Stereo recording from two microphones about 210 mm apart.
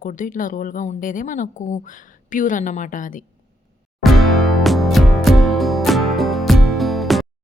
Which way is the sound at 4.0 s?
Centre (ahead or behind).